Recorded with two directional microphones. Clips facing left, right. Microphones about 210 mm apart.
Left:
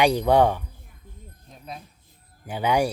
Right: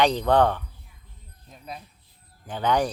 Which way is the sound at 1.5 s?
Centre (ahead or behind).